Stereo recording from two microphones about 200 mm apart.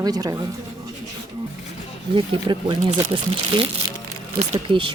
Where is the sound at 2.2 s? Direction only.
20° right (ahead or behind).